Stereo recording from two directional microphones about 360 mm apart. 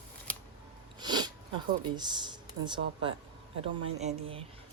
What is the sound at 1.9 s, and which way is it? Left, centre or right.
Speech, centre.